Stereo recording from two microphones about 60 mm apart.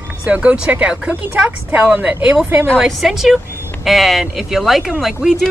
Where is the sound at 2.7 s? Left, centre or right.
Centre.